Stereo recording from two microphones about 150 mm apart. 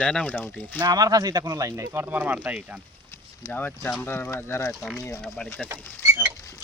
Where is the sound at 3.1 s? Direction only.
15° left (ahead or behind).